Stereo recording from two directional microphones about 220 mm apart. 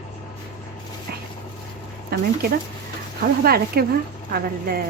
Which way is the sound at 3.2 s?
45° right (ahead or behind).